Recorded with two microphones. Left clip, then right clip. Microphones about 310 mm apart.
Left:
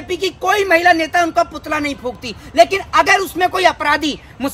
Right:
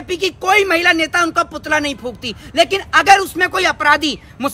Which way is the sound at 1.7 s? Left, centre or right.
Right.